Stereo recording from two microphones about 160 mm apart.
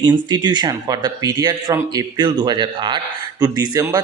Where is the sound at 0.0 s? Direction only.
25° right (ahead or behind).